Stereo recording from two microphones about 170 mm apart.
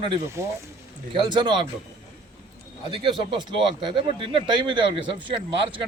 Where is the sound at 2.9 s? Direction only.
30° right (ahead or behind).